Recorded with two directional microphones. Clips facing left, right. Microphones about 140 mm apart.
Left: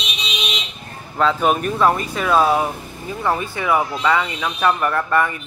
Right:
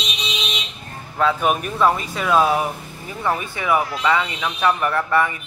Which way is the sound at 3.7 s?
25° left (ahead or behind).